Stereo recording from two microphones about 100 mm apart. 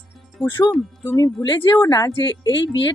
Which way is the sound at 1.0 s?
30° left (ahead or behind).